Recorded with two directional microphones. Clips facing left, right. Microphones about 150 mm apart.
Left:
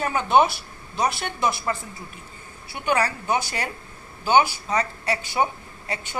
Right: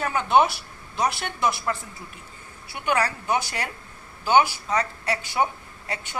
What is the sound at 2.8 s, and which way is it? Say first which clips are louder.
A woman's voice: left 1 dB; 20° left (ahead or behind).